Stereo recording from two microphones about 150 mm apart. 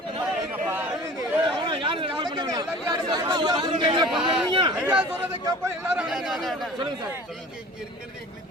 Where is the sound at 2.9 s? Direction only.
30° right (ahead or behind).